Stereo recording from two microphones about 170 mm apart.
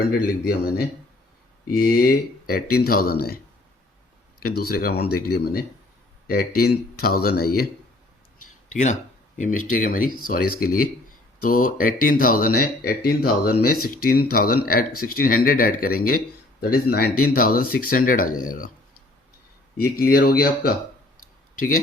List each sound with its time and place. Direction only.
0.4 s speech: 65° left (ahead or behind)
4.4 s speech: 65° left (ahead or behind)
8.7 s speech: 45° left (ahead or behind)
19.8 s speech: 60° left (ahead or behind)